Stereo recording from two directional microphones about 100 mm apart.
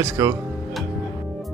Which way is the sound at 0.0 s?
30° right (ahead or behind).